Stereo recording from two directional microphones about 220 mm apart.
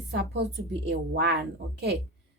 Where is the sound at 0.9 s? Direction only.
50° right (ahead or behind).